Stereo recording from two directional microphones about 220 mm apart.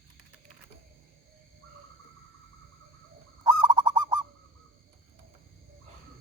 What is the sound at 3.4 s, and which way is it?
Honk, 20° right (ahead or behind).